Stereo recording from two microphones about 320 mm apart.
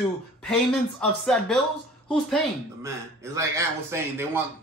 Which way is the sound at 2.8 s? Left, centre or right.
Centre.